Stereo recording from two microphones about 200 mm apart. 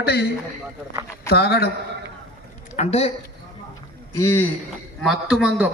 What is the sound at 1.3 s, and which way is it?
Speech, 55° left (ahead or behind).